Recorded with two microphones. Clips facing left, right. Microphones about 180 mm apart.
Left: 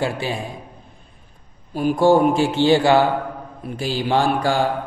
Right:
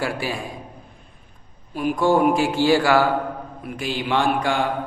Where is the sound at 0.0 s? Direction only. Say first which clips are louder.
Left 2 dB; 25° left (ahead or behind).